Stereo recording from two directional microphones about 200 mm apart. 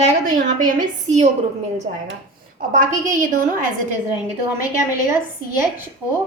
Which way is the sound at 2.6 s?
40° right (ahead or behind).